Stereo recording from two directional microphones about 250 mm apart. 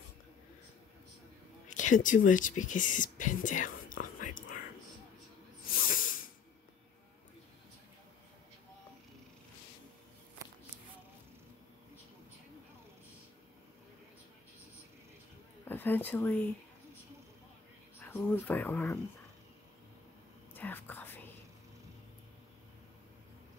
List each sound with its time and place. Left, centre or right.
1.7 s whispering: left
5.9 s hiss: left
15.6 s a sound: centre
18.0 s speech: centre
20.5 s whispering: centre